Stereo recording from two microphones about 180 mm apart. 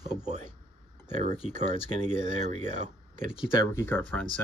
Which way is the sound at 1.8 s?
30° left (ahead or behind).